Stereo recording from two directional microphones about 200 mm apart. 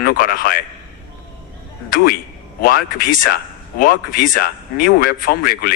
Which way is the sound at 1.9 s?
45° left (ahead or behind).